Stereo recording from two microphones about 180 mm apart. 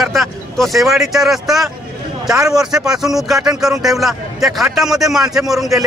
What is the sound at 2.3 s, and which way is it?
Speech, 20° right (ahead or behind).